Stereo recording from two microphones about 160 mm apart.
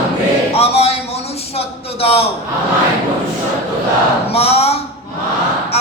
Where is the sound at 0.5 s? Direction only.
40° left (ahead or behind).